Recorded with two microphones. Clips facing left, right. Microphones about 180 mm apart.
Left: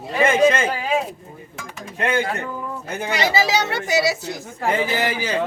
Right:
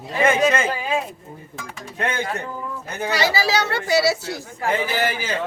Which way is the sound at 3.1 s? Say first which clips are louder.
Left 1 dB; 20° left (ahead or behind).